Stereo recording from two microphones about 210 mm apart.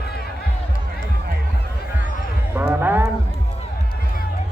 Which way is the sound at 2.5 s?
10° right (ahead or behind).